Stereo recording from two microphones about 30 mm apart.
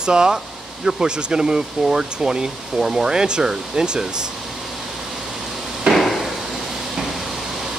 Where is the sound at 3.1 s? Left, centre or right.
Right.